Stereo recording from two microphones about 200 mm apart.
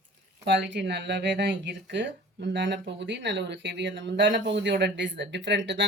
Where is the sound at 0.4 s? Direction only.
60° right (ahead or behind).